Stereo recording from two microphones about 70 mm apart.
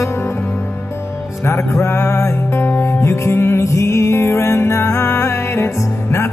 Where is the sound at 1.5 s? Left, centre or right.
Left.